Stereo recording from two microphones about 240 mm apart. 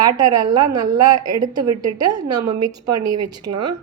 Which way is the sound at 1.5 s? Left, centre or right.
Right.